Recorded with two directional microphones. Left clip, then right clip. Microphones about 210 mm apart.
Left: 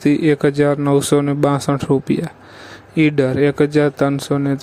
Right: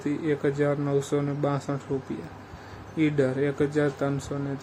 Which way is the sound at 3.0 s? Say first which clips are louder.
Left 10 dB; 45° left (ahead or behind).